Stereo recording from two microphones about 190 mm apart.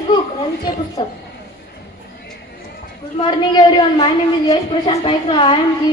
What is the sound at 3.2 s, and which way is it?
A woman's voice, 25° left (ahead or behind).